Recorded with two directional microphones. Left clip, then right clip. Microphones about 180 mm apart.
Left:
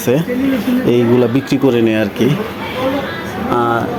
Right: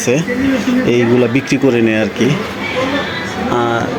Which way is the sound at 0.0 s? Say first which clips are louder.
Right 1 dB; 15° left (ahead or behind).